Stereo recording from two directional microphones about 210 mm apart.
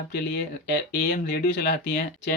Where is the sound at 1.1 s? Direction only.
50° left (ahead or behind).